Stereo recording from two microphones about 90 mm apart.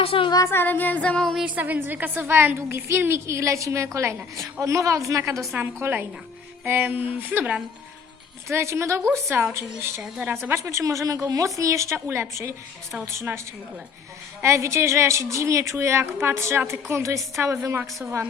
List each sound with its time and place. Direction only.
0.0 s speech: 90° left
0.4 s music: 25° left (ahead or behind); by 1.4 s 10° left (ahead or behind)
1.5 s a woman's voice: 20° right (ahead or behind); by 5.5 s 35° right (ahead or behind)
5.5 s a woman's voice: 25° right (ahead or behind)
8.4 s a woman's voice: 30° right (ahead or behind)
9.3 s a woman's voice: 20° right (ahead or behind)
10.0 s a woman's voice: 10° right (ahead or behind)
10.5 s a woman's voice: 30° right (ahead or behind)
14.4 s a woman's voice: 35° right (ahead or behind)